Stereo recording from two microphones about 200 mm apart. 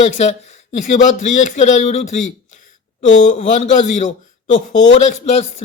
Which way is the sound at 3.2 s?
35° left (ahead or behind).